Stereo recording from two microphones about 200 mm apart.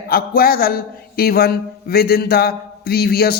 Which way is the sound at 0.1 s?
50° left (ahead or behind).